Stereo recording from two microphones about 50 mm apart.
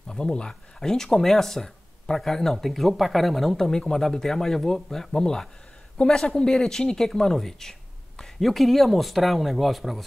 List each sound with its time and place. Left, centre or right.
0.1 s speech: centre